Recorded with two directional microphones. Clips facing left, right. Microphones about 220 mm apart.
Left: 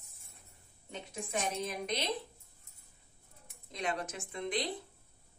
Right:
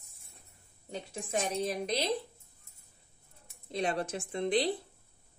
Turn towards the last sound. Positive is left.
turn(degrees=-30)  # may be behind; listen again after turning